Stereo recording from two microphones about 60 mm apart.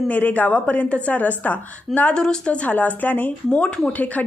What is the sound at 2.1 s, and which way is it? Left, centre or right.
Speech, centre.